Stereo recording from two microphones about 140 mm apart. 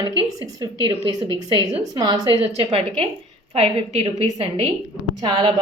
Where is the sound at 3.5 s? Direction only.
45° right (ahead or behind).